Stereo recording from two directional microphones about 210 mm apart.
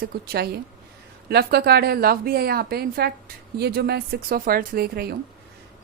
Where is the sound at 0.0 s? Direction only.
50° right (ahead or behind).